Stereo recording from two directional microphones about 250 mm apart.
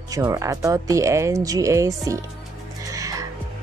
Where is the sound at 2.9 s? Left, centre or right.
Centre.